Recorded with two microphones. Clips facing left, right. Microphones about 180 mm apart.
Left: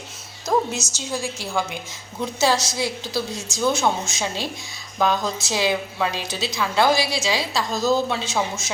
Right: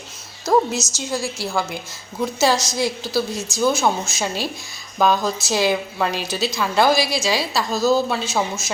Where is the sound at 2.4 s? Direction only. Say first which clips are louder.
Right 2 dB; 10° right (ahead or behind).